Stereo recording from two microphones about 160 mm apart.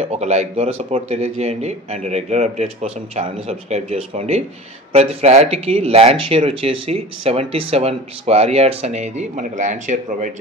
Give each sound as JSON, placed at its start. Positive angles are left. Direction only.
{"t": 0.0, "sound": "speech", "side_deg": -45}